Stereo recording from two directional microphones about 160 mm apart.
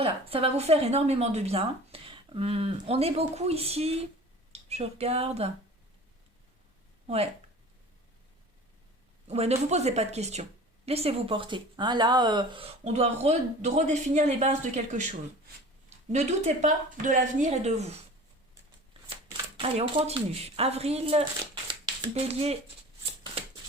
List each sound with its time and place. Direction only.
0.0 s speech: 35° right (ahead or behind)
9.2 s speech: 40° right (ahead or behind)
16.1 s speech: 45° right (ahead or behind)
19.5 s speech: 35° right (ahead or behind)